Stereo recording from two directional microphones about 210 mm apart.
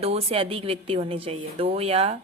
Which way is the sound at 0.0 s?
30° right (ahead or behind).